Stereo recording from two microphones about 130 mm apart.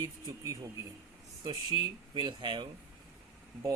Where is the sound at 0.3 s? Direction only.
25° right (ahead or behind).